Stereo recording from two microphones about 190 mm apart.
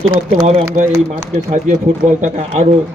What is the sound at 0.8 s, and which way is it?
Speech, 40° right (ahead or behind).